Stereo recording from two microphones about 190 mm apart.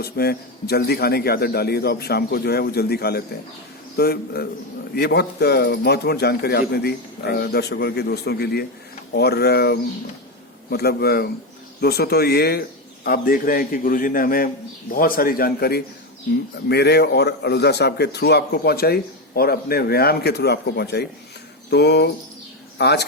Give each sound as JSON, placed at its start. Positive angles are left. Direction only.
{"t": 0.0, "sound": "a man's voice", "side_deg": 55}